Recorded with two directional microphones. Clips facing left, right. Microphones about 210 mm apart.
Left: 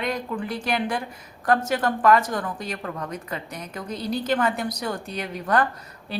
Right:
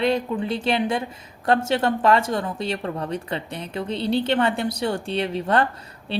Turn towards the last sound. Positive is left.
turn(degrees=-25)  # may be behind; listen again after turning